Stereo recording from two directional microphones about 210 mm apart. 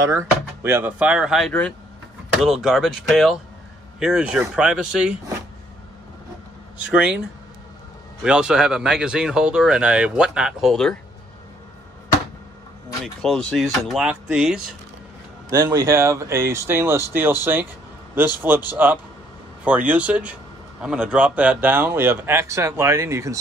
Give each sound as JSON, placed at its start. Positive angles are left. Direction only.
{"t": 0.0, "sound": "speech", "side_deg": -15}
{"t": 6.9, "sound": "speech", "side_deg": -5}
{"t": 8.2, "sound": "speech", "side_deg": -5}
{"t": 13.0, "sound": "speech", "side_deg": 0}
{"t": 15.5, "sound": "speech", "side_deg": -15}